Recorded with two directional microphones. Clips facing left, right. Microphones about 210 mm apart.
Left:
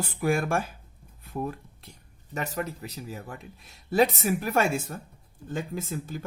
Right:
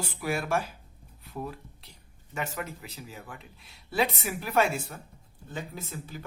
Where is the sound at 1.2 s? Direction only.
50° left (ahead or behind).